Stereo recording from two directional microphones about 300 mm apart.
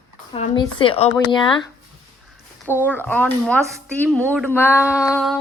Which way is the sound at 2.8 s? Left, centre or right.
Centre.